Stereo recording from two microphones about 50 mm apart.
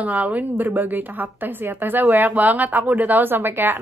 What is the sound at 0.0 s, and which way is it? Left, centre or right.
A woman's voice, right.